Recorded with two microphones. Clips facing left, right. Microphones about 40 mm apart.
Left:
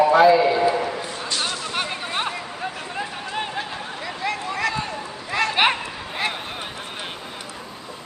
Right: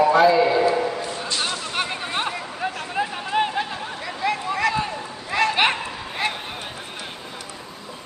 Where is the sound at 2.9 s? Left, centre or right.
Centre.